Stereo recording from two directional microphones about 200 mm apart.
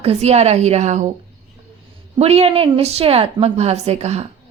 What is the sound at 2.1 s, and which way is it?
A woman's voice, 30° right (ahead or behind).